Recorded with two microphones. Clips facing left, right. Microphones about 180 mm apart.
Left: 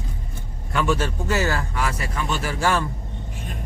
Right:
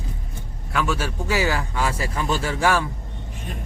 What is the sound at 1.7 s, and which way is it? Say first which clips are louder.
Speech: right 2 dB; 25° right (ahead or behind).